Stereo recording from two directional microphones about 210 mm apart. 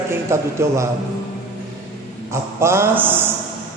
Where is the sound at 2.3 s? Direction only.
10° right (ahead or behind).